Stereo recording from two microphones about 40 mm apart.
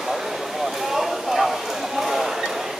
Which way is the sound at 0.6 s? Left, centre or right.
Centre.